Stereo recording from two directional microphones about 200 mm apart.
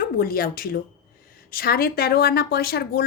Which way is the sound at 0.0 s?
45° left (ahead or behind).